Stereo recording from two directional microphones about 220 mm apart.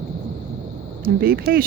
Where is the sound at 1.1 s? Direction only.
45° right (ahead or behind).